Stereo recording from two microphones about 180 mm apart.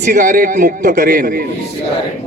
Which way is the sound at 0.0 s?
45° right (ahead or behind).